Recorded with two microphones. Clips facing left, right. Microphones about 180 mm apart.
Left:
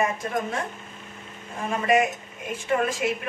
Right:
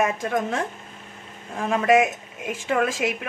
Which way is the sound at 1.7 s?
90° right.